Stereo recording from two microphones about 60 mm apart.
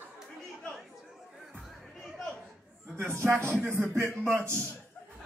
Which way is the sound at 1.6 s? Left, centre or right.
Centre.